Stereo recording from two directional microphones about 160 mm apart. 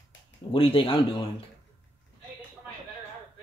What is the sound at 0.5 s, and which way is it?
Speech, 35° left (ahead or behind).